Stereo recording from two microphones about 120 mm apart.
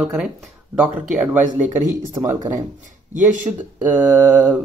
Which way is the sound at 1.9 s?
20° right (ahead or behind).